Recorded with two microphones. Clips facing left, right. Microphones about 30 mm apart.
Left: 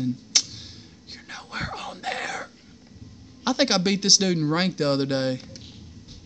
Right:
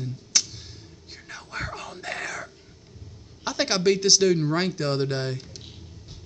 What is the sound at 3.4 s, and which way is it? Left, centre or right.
Speech, left.